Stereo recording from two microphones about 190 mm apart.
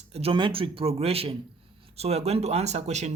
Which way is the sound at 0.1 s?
30° right (ahead or behind).